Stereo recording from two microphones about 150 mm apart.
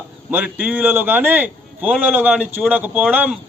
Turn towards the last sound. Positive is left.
turn(degrees=-10)  # may be behind; listen again after turning